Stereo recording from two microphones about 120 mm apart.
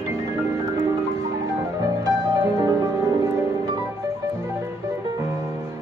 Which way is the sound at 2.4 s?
20° right (ahead or behind).